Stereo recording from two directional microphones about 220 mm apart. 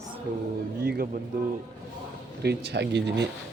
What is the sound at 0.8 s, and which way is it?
Speech, 45° right (ahead or behind).